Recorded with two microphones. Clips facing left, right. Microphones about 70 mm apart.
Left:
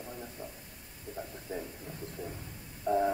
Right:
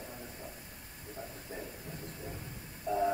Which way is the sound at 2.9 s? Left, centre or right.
Left.